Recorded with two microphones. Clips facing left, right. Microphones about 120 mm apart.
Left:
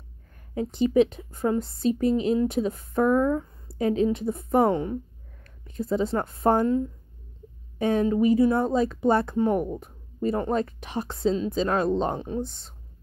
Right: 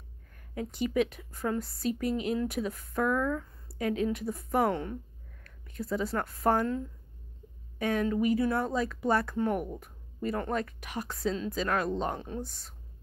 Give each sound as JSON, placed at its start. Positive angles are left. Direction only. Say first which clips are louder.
{"t": 0.6, "sound": "a woman's voice", "louder": "left 8 dB", "side_deg": 25}
{"t": 7.8, "sound": "speech", "louder": "left 6 dB", "side_deg": 25}